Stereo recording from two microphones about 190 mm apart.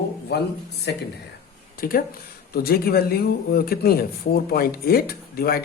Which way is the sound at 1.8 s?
50° left (ahead or behind).